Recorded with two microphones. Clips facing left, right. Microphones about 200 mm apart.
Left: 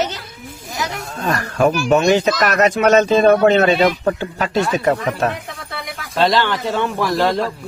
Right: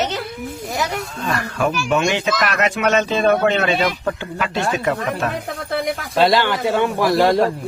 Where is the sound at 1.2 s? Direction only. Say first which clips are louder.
Left 5 dB; 40° left (ahead or behind).